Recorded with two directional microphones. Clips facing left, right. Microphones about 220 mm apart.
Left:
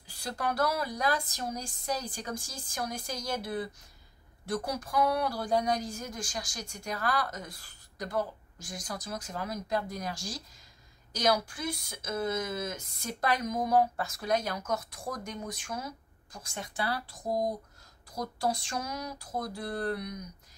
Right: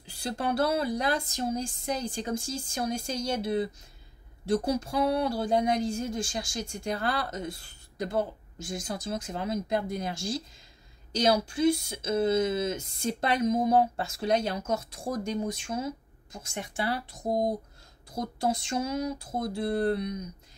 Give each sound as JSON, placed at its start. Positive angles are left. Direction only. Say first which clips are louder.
{"t": 0.0, "sound": "speech", "louder": "right 3 dB", "side_deg": -25}